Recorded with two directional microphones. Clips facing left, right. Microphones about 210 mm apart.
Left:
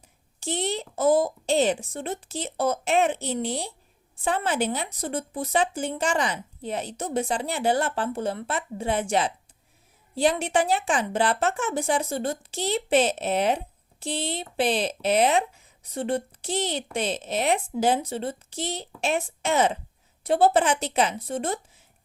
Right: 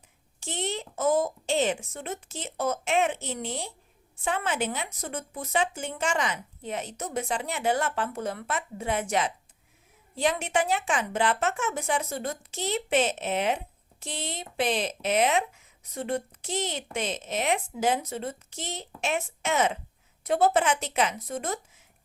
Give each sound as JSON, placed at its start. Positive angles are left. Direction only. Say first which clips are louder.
{"t": 0.3, "sound": "speech", "louder": "left 4 dB", "side_deg": 35}